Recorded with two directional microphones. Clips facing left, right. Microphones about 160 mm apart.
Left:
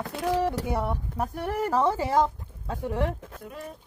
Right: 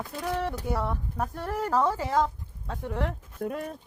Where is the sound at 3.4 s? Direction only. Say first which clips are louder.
Right 8 dB; 55° right (ahead or behind).